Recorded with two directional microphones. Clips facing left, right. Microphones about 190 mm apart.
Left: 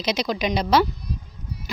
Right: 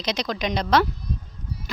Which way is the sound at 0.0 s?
5° left (ahead or behind).